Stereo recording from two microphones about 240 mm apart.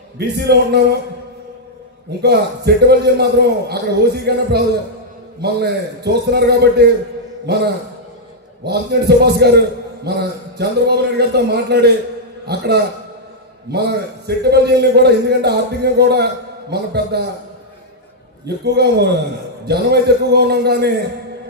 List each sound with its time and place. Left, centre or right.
0.2 s a man's voice: right
2.2 s a man's voice: right
18.6 s a man's voice: right